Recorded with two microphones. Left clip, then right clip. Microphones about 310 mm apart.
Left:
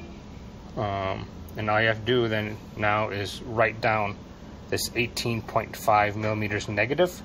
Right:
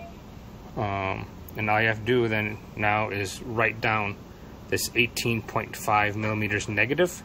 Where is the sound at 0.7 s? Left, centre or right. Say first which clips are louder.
Even; centre.